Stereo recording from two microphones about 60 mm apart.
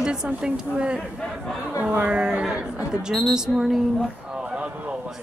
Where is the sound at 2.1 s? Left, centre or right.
Centre.